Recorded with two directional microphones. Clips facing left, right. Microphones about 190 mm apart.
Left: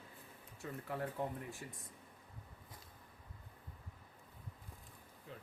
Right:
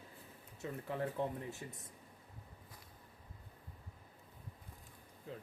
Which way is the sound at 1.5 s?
25° right (ahead or behind).